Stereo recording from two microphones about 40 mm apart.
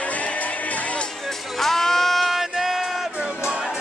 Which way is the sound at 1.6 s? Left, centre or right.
Centre.